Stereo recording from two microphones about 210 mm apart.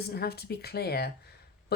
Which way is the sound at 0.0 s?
50° left (ahead or behind).